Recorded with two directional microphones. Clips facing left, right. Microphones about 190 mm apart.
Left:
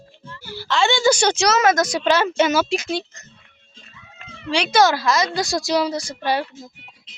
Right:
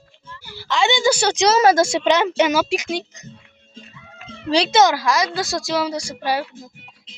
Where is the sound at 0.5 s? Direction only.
15° right (ahead or behind).